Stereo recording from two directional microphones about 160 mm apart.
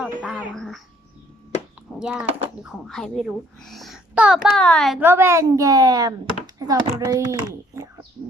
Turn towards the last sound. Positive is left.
turn(degrees=-25)  # may be behind; listen again after turning